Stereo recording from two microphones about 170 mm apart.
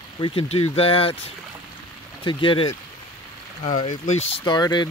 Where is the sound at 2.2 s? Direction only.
30° left (ahead or behind).